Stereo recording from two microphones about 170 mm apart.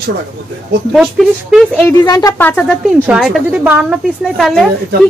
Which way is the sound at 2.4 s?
5° left (ahead or behind).